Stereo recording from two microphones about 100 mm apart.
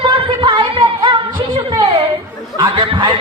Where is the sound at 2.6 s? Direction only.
55° right (ahead or behind).